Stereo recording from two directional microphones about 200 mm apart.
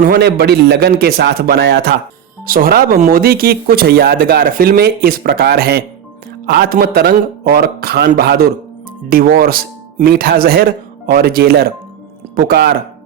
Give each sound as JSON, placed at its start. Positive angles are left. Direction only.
{"t": 0.0, "sound": "speech", "side_deg": -50}